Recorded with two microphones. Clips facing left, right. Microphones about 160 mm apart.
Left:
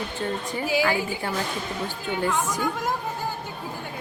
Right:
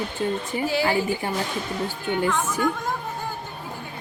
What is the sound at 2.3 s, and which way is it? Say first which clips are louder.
Speech: right 1 dB; 15° left (ahead or behind).